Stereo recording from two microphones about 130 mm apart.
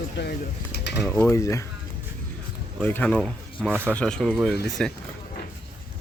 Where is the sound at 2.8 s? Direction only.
10° left (ahead or behind).